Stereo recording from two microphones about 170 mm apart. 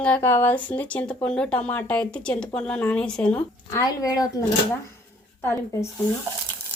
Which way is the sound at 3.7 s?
20° left (ahead or behind).